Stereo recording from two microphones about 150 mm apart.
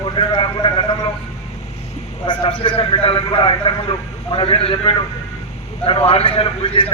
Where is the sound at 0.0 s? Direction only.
35° left (ahead or behind).